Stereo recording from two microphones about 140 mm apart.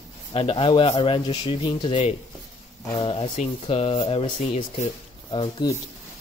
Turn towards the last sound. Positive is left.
turn(degrees=35)  # may be behind; listen again after turning